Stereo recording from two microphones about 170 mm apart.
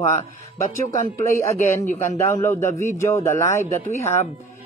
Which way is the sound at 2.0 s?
15° left (ahead or behind).